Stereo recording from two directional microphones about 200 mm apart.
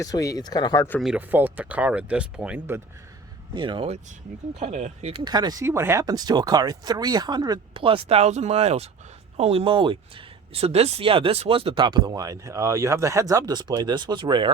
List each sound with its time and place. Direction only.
0.0 s speech: 15° left (ahead or behind)
0.9 s speech: 5° right (ahead or behind)
3.5 s speech: 25° right (ahead or behind)